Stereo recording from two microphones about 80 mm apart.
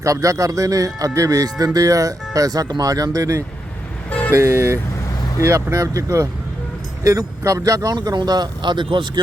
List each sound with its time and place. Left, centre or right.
0.0 s speech: right
8.0 s speech: right